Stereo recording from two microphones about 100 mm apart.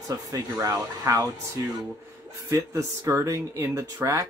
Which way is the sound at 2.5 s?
35° right (ahead or behind).